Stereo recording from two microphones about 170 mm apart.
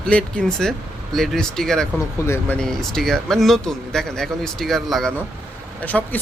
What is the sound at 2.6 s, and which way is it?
Speech, centre (ahead or behind).